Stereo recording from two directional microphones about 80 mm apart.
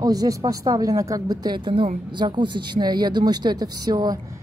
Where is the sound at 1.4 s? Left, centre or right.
Right.